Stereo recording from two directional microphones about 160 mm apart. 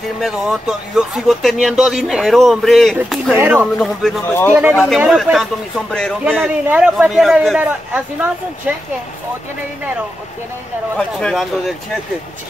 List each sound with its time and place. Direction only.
0.2 s speech: 5° right (ahead or behind)
3.3 s a man's voice: 15° right (ahead or behind)
3.8 s speech: centre (ahead or behind)
4.5 s a man's voice: 10° right (ahead or behind)
6.2 s a man's voice: 10° right (ahead or behind)
11.0 s speech: 5° left (ahead or behind)